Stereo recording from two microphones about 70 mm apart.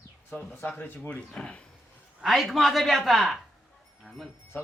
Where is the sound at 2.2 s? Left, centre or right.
Centre.